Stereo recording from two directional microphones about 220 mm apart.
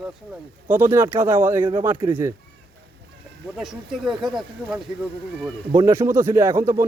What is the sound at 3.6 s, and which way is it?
A man's voice, centre (ahead or behind).